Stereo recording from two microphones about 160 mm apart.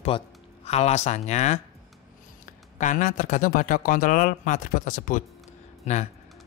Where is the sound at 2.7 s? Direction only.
50° left (ahead or behind).